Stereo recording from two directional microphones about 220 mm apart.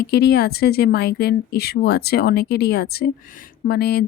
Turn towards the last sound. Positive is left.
turn(degrees=45)  # may be behind; listen again after turning